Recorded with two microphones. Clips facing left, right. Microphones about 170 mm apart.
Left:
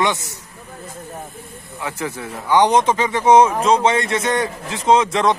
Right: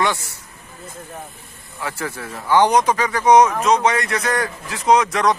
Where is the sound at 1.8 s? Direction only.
20° left (ahead or behind).